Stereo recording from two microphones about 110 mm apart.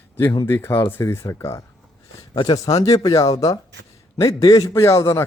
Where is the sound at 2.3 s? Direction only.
45° left (ahead or behind).